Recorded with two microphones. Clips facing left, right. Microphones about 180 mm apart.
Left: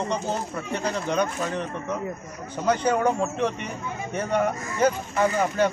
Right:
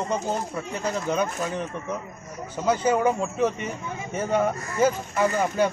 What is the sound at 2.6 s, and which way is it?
Speech, 5° right (ahead or behind).